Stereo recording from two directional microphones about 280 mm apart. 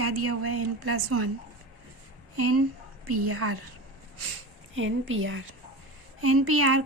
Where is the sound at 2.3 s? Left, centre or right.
Right.